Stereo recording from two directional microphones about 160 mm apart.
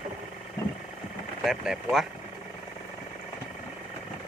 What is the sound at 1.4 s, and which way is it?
Speech, 5° right (ahead or behind).